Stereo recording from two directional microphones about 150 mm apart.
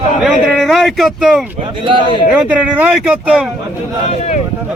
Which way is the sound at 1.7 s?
35° right (ahead or behind).